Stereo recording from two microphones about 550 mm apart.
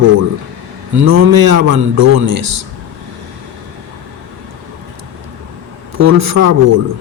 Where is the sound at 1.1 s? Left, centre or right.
Right.